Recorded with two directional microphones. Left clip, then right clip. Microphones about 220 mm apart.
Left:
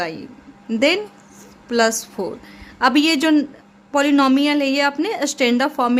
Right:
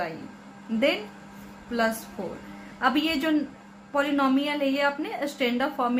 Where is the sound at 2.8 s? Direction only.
55° left (ahead or behind).